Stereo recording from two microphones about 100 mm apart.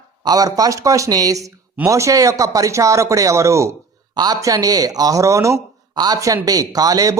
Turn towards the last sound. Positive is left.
turn(degrees=-35)  # may be behind; listen again after turning